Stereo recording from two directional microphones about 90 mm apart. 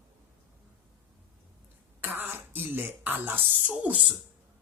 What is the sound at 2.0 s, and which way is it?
Speech, 20° right (ahead or behind).